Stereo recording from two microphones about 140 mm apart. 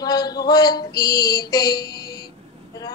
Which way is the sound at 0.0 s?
30° left (ahead or behind).